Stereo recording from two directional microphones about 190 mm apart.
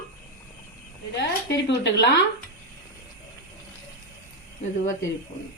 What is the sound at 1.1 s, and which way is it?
Speech, 70° left (ahead or behind).